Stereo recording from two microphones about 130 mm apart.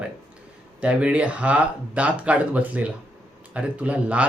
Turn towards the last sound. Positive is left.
turn(degrees=-10)  # may be behind; listen again after turning